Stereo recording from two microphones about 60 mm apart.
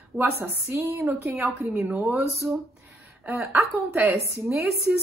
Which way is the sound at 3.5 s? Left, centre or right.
Right.